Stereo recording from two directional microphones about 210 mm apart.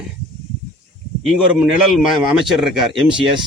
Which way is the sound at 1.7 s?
Centre (ahead or behind).